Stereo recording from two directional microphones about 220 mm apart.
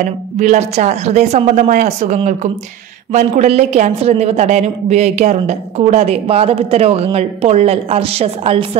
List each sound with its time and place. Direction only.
0.4 s a woman's voice: 30° right (ahead or behind)